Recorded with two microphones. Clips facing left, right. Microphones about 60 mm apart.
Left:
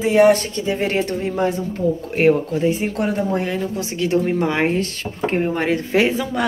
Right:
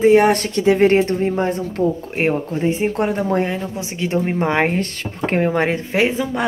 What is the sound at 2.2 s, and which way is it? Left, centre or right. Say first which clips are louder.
A woman's voice: left 3 dB; right.